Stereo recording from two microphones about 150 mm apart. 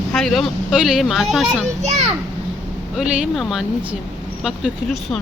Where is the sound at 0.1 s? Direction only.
Centre (ahead or behind).